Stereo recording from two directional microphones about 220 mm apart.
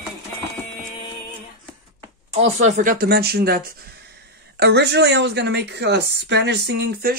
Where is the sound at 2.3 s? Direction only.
30° right (ahead or behind).